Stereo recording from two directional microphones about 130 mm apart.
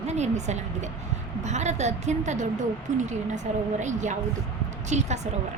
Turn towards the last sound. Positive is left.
turn(degrees=-60)  # may be behind; listen again after turning